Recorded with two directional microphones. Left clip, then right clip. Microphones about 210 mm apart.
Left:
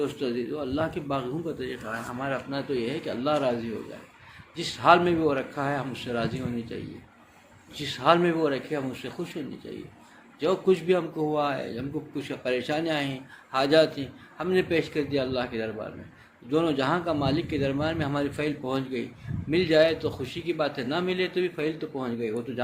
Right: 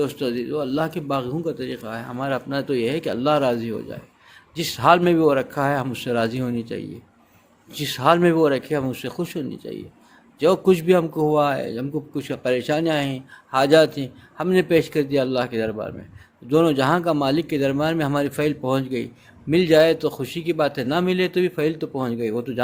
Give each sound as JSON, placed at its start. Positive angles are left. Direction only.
{"t": 0.0, "sound": "a man's voice", "side_deg": -55}